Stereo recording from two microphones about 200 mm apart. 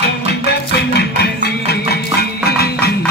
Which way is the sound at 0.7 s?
55° left (ahead or behind).